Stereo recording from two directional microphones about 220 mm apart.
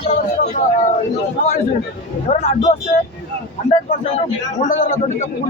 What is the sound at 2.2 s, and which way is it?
Speech, 30° left (ahead or behind).